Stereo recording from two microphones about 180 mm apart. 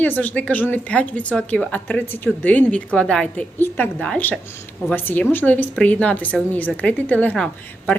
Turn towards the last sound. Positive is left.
turn(degrees=5)  # may be behind; listen again after turning